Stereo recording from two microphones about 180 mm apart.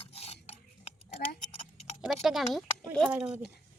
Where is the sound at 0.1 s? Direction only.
35° left (ahead or behind).